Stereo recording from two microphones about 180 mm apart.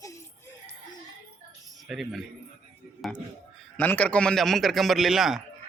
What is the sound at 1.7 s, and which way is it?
Speech, centre (ahead or behind).